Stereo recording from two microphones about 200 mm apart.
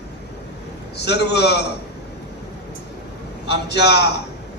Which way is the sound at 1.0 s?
60° left (ahead or behind).